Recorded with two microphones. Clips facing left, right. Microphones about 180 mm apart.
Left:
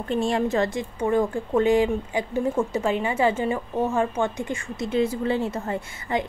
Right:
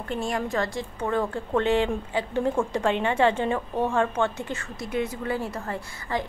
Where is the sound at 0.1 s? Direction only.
25° left (ahead or behind).